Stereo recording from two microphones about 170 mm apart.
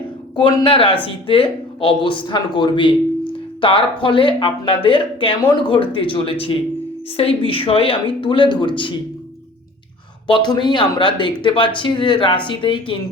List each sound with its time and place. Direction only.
0.3 s speech: 25° left (ahead or behind)
10.2 s speech: 25° left (ahead or behind)